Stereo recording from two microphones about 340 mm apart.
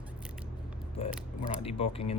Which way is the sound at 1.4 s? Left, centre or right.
Centre.